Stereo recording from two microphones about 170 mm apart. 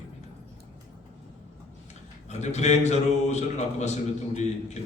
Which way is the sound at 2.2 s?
40° left (ahead or behind).